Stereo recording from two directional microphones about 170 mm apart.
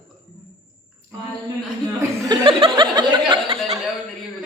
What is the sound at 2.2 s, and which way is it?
Speech, 25° right (ahead or behind).